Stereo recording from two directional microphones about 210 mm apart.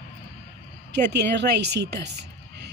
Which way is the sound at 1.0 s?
55° right (ahead or behind).